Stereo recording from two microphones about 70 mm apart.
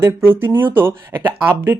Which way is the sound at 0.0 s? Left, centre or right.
Right.